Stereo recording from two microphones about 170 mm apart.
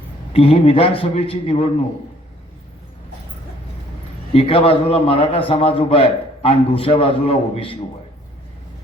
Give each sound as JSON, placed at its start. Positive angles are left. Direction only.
{"t": 0.3, "sound": "a man's voice", "side_deg": 35}
{"t": 4.4, "sound": "a man's voice", "side_deg": 35}